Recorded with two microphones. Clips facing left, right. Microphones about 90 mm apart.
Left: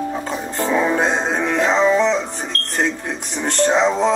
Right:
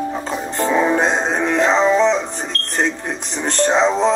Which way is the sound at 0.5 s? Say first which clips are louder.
Right 2 dB; 25° right (ahead or behind).